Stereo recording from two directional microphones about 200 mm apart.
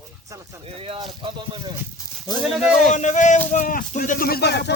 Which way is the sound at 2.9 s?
40° left (ahead or behind).